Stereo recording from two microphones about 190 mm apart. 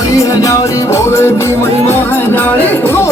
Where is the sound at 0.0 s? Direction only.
15° left (ahead or behind).